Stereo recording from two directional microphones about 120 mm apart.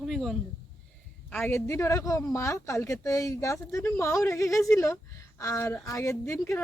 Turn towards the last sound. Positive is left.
turn(degrees=25)  # may be behind; listen again after turning